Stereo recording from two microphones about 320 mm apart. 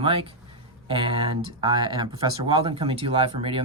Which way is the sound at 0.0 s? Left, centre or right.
Centre.